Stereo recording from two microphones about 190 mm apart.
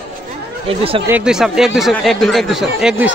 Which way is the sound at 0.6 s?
30° right (ahead or behind).